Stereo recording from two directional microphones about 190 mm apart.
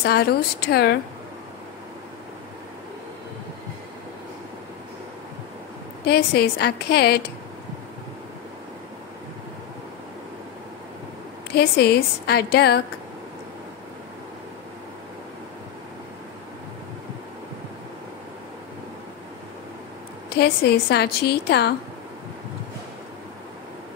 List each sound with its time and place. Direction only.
0.0 s a woman's voice: 55° left (ahead or behind)
6.0 s a woman's voice: 55° left (ahead or behind)
11.5 s a woman's voice: 55° left (ahead or behind)
20.2 s a woman's voice: 60° left (ahead or behind)